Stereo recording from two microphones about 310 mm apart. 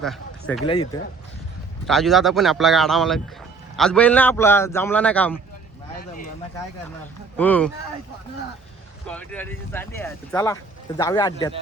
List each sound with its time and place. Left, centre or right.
0.0 s a sound: centre
0.6 s speech: centre
1.9 s a man's voice: centre
7.3 s a man's voice: centre
9.0 s speech: centre